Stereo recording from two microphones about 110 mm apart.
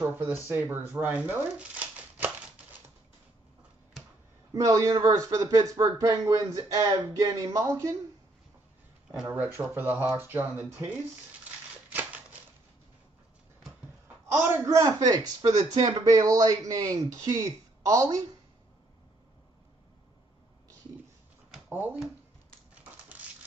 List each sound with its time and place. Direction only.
0.5 s speech: 20° right (ahead or behind)
4.6 s speech: 30° right (ahead or behind)
9.3 s speech: 15° right (ahead or behind)
11.4 s a sound: 15° right (ahead or behind)
14.2 s a woman's voice: 25° right (ahead or behind)
21.6 s speech: 15° right (ahead or behind)